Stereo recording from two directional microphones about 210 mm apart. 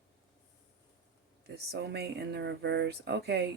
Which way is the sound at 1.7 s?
50° right (ahead or behind).